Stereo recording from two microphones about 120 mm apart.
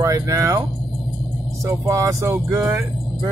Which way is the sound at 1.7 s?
25° right (ahead or behind).